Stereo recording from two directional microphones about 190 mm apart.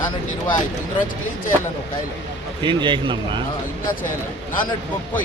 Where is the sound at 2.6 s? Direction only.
25° right (ahead or behind).